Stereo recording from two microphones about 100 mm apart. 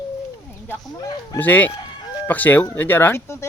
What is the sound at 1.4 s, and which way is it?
Speech, 20° left (ahead or behind).